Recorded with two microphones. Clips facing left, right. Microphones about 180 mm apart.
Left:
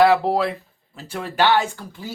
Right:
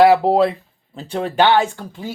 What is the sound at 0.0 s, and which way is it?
Speech, 15° right (ahead or behind).